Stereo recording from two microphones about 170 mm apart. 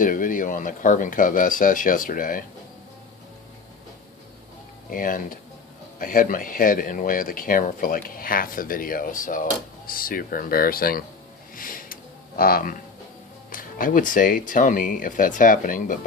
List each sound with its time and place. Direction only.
0.0 s speech: 50° left (ahead or behind)
4.9 s speech: 55° left (ahead or behind)
11.5 s music: 55° left (ahead or behind)
12.4 s speech: 60° left (ahead or behind)